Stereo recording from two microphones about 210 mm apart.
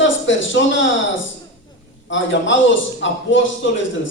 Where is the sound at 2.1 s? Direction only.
60° left (ahead or behind).